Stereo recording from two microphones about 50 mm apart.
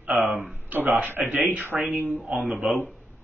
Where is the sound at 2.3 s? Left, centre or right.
Centre.